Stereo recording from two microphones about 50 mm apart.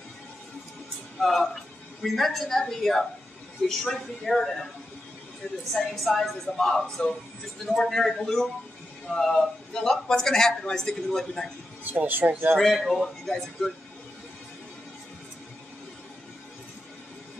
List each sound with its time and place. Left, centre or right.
1.2 s a woman's voice: centre
5.7 s a man's voice: centre
5.9 s a woman's voice: centre
11.8 s speech: right
12.5 s a man's voice: centre